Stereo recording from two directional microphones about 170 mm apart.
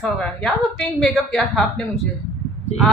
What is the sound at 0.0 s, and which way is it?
A woman's voice, 5° left (ahead or behind).